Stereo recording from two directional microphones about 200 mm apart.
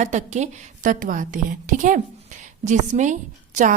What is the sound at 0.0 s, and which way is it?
A woman's voice, 35° right (ahead or behind).